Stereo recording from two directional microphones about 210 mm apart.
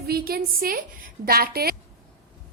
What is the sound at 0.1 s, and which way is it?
A woman's voice, 45° right (ahead or behind).